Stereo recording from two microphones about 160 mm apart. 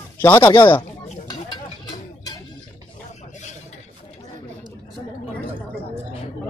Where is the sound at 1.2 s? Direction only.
25° left (ahead or behind).